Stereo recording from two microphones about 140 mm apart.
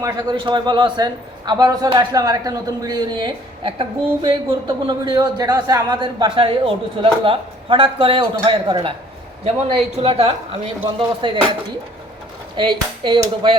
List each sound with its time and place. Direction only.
0.0 s a man's voice: 25° right (ahead or behind)
9.4 s a man's voice: 50° right (ahead or behind)
12.5 s speech: 35° right (ahead or behind)